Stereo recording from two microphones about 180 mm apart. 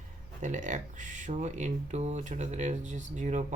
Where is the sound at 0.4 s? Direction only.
45° right (ahead or behind).